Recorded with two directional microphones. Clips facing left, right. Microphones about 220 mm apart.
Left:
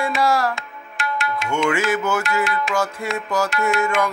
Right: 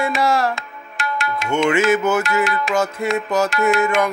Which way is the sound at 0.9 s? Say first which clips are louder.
Right 1 dB; 40° right (ahead or behind).